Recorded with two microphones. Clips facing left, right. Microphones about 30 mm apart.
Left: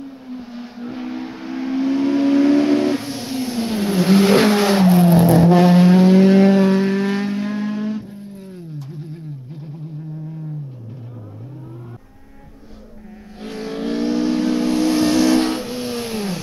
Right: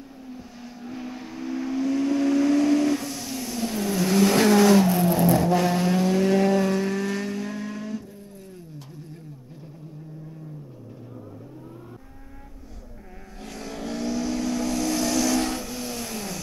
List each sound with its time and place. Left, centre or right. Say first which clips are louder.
0.0 s vehicle: left 8 dB; left
8.8 s a sound: left 9 dB; left
13.4 s vehicle: left 9 dB; left